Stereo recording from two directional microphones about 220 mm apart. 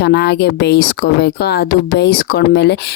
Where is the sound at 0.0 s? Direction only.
50° left (ahead or behind).